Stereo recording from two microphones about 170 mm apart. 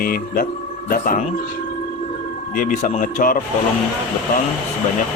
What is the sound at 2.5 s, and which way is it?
Speech, 50° left (ahead or behind).